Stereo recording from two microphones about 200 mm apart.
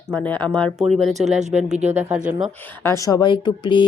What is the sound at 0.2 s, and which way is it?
Speech, 10° left (ahead or behind).